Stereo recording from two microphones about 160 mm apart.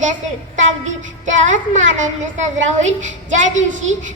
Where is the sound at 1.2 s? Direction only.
50° right (ahead or behind).